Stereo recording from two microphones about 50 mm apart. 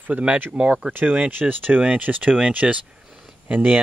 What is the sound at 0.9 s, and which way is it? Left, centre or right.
Speech, right.